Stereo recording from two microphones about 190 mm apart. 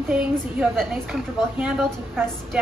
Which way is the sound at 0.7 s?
5° right (ahead or behind).